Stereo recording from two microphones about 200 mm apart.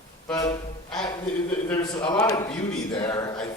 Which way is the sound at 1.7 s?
20° left (ahead or behind).